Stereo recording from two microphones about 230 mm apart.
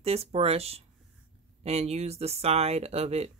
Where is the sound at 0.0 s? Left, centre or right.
Right.